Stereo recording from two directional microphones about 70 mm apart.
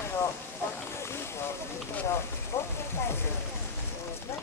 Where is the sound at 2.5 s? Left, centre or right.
Left.